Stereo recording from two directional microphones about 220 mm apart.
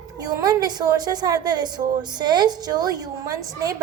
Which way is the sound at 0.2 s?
15° right (ahead or behind).